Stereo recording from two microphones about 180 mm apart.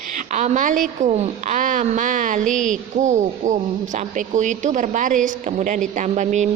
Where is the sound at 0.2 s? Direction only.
40° right (ahead or behind).